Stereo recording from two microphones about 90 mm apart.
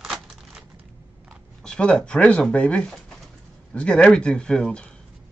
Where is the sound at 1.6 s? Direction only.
10° left (ahead or behind).